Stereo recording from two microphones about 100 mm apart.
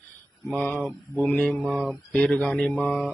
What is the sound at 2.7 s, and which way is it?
Mantra, centre (ahead or behind).